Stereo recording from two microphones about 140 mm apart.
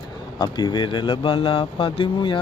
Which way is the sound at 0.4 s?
30° left (ahead or behind).